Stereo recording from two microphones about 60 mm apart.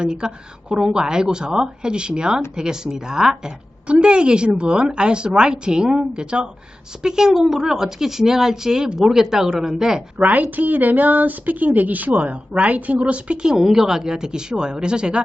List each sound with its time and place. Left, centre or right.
0.0 s speech: centre
10.2 s a woman's voice: right